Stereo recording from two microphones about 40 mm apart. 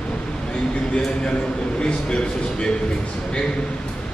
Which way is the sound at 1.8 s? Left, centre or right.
Left.